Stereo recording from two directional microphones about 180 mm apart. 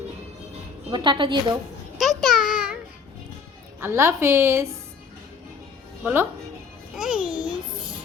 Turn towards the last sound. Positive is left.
turn(degrees=-5)  # may be behind; listen again after turning